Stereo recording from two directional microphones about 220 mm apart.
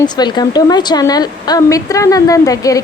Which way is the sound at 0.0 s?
20° left (ahead or behind).